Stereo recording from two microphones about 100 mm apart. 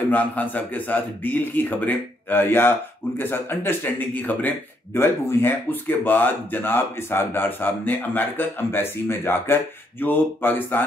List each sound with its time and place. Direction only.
0.1 s speech: 15° left (ahead or behind)